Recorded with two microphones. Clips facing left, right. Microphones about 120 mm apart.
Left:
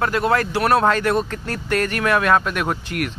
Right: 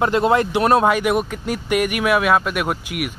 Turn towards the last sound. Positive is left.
turn(degrees=-10)  # may be behind; listen again after turning